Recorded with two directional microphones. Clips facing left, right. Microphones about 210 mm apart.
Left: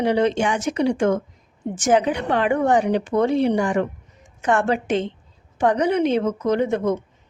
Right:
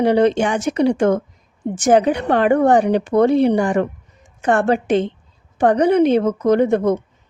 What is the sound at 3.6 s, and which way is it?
A woman's voice, 35° right (ahead or behind).